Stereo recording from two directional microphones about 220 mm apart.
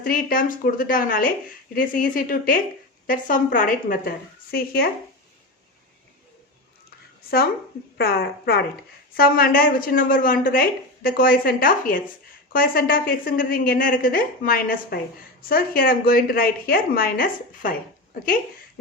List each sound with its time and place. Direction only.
0.0 s a woman's voice: 40° left (ahead or behind)
7.9 s a woman's voice: 45° left (ahead or behind)